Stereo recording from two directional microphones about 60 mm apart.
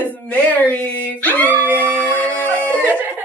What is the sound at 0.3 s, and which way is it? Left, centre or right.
Speech, left.